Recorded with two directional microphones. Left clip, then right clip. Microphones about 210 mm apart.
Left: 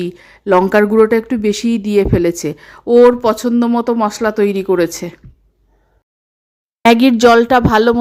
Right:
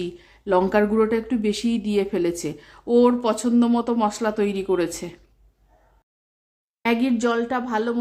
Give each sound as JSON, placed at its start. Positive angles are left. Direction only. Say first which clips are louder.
{"t": 0.0, "sound": "speech", "louder": "left 9 dB", "side_deg": 30}
{"t": 6.8, "sound": "speech", "louder": "left 13 dB", "side_deg": 45}